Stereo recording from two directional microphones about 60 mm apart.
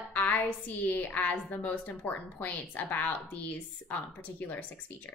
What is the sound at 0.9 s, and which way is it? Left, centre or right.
Speech, left.